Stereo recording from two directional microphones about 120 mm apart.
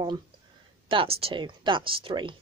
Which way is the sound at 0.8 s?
45° right (ahead or behind).